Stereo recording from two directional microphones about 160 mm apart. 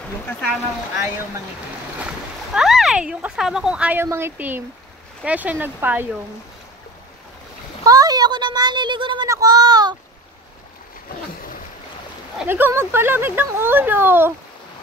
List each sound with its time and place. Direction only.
2.0 s speech: 5° right (ahead or behind)
7.8 s speech: 25° right (ahead or behind)
9.3 s a sound: 20° right (ahead or behind)
12.4 s speech: 15° right (ahead or behind)